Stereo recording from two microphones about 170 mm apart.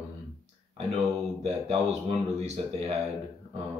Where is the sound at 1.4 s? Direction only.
40° right (ahead or behind).